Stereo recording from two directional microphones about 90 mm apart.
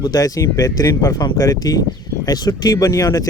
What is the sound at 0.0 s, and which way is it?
Speech, 45° left (ahead or behind).